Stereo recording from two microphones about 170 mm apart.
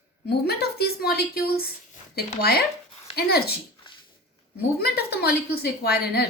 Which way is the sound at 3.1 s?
70° left (ahead or behind).